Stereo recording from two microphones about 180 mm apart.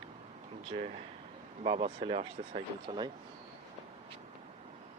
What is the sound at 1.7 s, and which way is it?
Speech, 30° right (ahead or behind).